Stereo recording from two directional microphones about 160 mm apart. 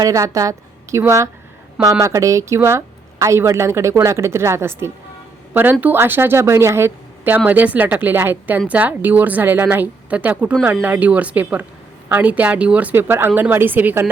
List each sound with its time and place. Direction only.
0.0 s a woman's voice: 20° right (ahead or behind)